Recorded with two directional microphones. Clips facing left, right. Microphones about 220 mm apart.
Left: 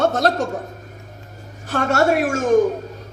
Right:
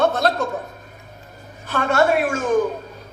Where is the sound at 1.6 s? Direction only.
45° left (ahead or behind).